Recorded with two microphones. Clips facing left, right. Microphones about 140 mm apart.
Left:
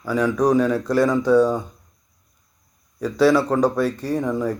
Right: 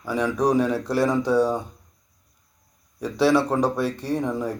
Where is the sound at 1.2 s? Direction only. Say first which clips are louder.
Left 6 dB; 35° right (ahead or behind).